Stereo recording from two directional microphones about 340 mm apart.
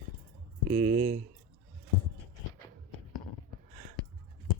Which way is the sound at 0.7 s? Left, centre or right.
Right.